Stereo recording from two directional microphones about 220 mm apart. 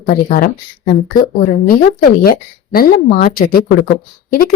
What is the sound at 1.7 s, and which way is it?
A woman's voice, 40° left (ahead or behind).